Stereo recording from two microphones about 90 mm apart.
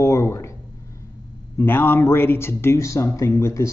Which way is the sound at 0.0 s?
30° left (ahead or behind).